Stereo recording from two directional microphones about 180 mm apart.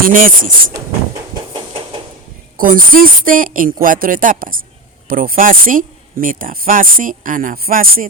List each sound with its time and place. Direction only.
0.0 s speech: 50° right (ahead or behind)
1.5 s a sound: 25° right (ahead or behind)
2.6 s speech: 50° right (ahead or behind)